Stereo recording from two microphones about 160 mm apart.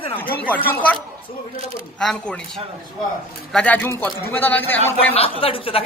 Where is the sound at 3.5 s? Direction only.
5° left (ahead or behind).